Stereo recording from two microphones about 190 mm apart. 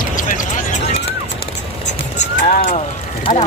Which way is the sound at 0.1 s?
45° left (ahead or behind).